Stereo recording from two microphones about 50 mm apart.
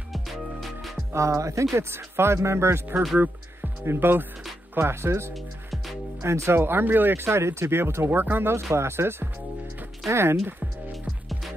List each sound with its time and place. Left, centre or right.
0.1 s music: centre
1.1 s speech: right
5.3 s music: centre
6.2 s speech: right
6.6 s speech: right
8.7 s speech: right